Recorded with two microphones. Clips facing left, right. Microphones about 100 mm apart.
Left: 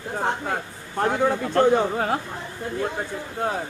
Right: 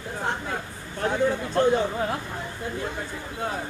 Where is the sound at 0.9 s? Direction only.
60° left (ahead or behind).